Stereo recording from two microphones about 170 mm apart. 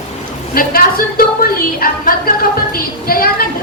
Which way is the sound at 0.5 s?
60° left (ahead or behind).